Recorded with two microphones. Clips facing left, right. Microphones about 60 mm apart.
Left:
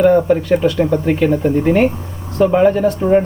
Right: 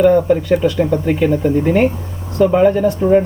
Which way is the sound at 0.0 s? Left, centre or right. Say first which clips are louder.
Even; centre.